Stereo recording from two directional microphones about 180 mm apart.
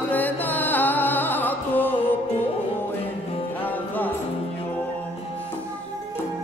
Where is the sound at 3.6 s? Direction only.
10° left (ahead or behind).